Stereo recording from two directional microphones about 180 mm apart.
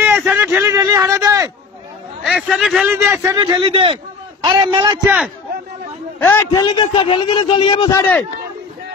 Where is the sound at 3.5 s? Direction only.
30° right (ahead or behind).